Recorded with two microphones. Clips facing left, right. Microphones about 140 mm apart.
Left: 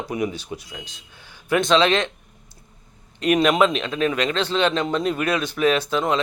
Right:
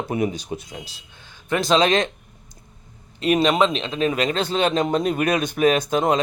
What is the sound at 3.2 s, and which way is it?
Speech, 30° right (ahead or behind).